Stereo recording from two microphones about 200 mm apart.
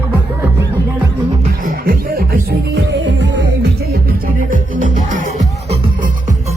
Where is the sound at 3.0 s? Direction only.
60° right (ahead or behind).